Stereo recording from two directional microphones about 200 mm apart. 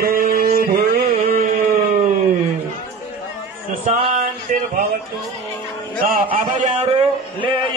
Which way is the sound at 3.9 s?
35° right (ahead or behind).